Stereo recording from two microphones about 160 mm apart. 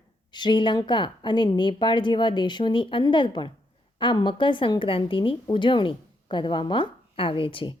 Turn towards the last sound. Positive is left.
turn(degrees=35)  # may be behind; listen again after turning